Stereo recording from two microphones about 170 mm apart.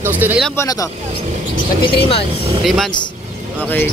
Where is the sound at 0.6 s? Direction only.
20° left (ahead or behind).